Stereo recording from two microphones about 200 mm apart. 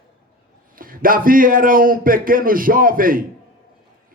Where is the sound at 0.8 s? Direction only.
45° right (ahead or behind).